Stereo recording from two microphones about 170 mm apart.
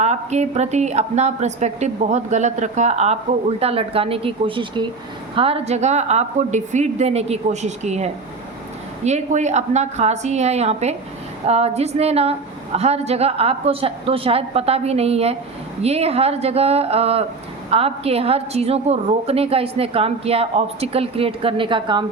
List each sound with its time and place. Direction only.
0.0 s a woman's voice: 40° right (ahead or behind)